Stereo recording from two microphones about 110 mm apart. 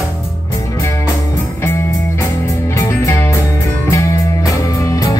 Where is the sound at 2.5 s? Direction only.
25° left (ahead or behind).